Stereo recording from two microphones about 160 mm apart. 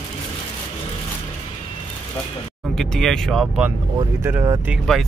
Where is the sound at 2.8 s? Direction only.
5° left (ahead or behind).